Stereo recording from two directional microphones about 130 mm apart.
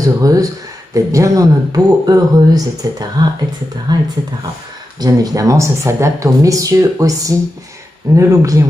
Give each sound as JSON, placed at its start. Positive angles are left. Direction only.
{"t": 0.0, "sound": "speech", "side_deg": -25}